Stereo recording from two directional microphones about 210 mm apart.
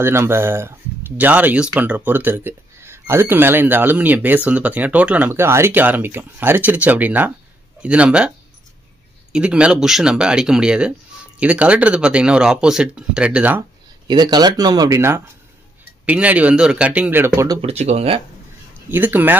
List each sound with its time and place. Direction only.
0.0 s speech: 10° right (ahead or behind)
9.3 s speech: 5° right (ahead or behind)
14.0 s speech: 20° right (ahead or behind)
17.6 s speech: 30° right (ahead or behind)
18.9 s speech: 10° right (ahead or behind)